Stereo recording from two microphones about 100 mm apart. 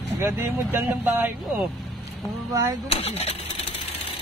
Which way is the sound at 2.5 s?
35° right (ahead or behind).